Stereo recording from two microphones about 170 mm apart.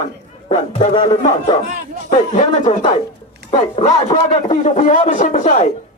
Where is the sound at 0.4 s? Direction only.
40° left (ahead or behind).